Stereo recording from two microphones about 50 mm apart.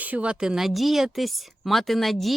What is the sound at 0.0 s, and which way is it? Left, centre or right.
Speech, right.